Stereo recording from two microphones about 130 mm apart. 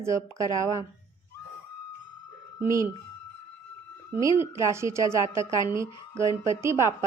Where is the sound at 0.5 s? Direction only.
25° right (ahead or behind).